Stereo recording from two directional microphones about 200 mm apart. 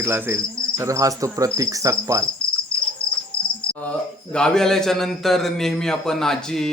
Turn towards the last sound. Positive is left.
turn(degrees=0)  # may be behind; listen again after turning